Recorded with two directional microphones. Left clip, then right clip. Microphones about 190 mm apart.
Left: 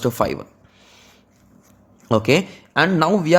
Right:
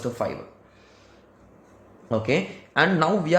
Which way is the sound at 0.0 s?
45° left (ahead or behind).